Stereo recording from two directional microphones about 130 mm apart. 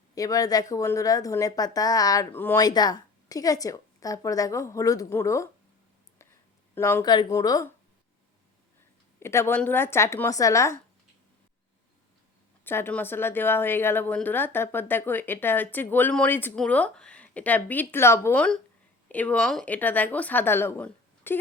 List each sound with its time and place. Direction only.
0.1 s a woman's voice: 25° left (ahead or behind)
2.3 s a woman's voice: 15° left (ahead or behind)
2.6 s a woman's voice: 30° left (ahead or behind)
6.7 s speech: 20° left (ahead or behind)
7.0 s a woman's voice: 30° left (ahead or behind)
9.2 s a woman's voice: 20° left (ahead or behind)
12.6 s a woman's voice: 15° left (ahead or behind)